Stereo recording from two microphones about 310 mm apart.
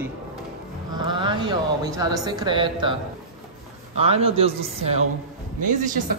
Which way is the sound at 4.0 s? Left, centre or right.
Centre.